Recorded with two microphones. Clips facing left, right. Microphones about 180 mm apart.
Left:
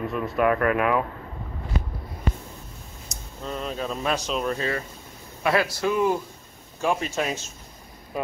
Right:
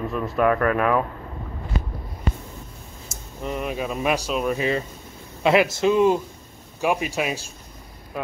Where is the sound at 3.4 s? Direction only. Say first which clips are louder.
Right 3 dB; 15° right (ahead or behind).